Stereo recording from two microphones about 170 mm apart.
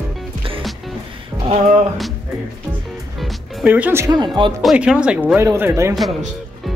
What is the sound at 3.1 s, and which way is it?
Music, 5° right (ahead or behind).